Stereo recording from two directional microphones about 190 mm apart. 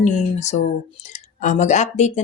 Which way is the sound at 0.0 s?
35° left (ahead or behind).